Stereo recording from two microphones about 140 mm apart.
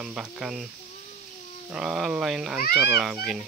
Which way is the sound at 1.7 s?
5° right (ahead or behind).